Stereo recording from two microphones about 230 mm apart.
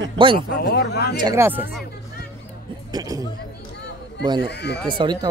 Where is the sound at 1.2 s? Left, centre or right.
Centre.